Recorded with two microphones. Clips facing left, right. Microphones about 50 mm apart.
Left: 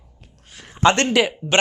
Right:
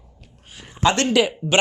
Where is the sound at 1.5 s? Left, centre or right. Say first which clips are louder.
Even; centre.